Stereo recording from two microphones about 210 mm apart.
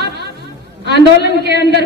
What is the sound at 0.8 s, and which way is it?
Speech, 55° left (ahead or behind).